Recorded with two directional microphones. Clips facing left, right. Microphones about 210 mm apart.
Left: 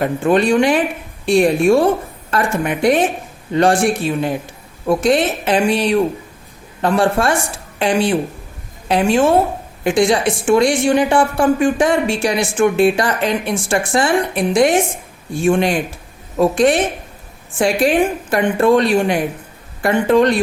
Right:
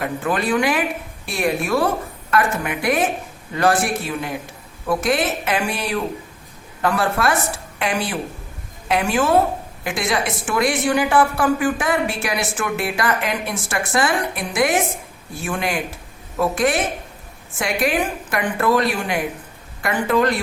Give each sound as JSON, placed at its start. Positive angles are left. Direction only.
{"t": 0.0, "sound": "speech", "side_deg": 25}